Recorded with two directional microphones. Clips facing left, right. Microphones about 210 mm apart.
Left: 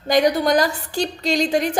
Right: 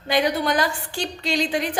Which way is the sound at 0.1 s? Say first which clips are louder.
Left 5 dB; 40° left (ahead or behind).